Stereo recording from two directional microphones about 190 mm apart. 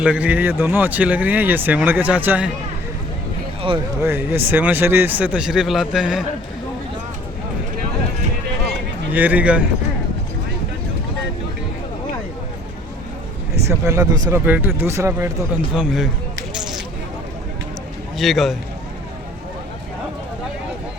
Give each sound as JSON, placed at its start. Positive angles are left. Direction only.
{"t": 0.0, "sound": "speech", "side_deg": -5}
{"t": 4.0, "sound": "speech", "side_deg": -10}
{"t": 9.1, "sound": "speech", "side_deg": -10}
{"t": 13.7, "sound": "speech", "side_deg": -15}
{"t": 15.7, "sound": "a man's voice", "side_deg": -5}
{"t": 16.6, "sound": "a sound", "side_deg": 0}
{"t": 18.2, "sound": "a man's voice", "side_deg": 0}